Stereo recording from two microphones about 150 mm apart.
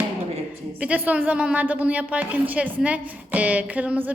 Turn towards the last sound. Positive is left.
turn(degrees=-10)  # may be behind; listen again after turning